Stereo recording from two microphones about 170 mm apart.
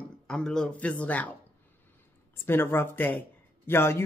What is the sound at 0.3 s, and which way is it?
A man's voice, 5° left (ahead or behind).